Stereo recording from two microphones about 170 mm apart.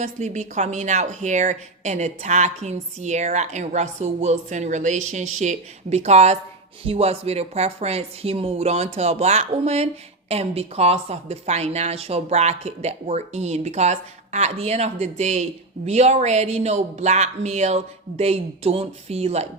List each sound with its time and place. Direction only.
0.0 s a woman's voice: 45° right (ahead or behind)